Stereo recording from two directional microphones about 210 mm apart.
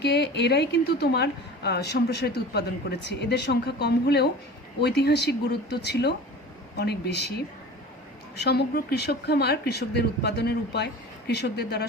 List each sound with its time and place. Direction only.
0.0 s a woman's voice: 50° left (ahead or behind)
8.4 s a woman's voice: 50° left (ahead or behind)